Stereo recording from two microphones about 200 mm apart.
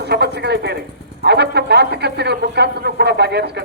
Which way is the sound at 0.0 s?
55° right (ahead or behind).